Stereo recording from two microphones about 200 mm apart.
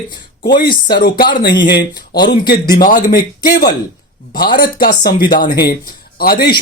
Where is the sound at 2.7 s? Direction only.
45° left (ahead or behind).